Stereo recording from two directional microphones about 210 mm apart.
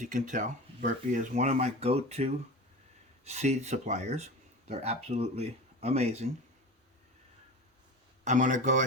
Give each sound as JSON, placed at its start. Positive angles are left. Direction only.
{"t": 0.0, "sound": "speech", "side_deg": -35}
{"t": 8.2, "sound": "speech", "side_deg": -35}